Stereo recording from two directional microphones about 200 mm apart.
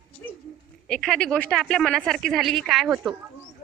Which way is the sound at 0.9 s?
5° left (ahead or behind).